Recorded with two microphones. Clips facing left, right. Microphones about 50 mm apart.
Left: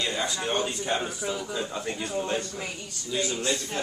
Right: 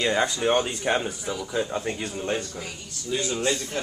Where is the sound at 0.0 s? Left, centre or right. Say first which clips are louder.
Right 6 dB; right.